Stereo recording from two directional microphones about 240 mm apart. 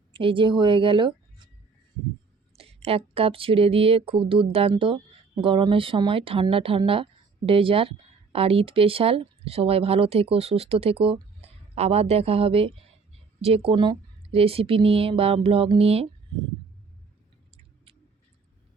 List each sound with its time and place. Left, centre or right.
0.1 s speech: right
2.6 s speech: right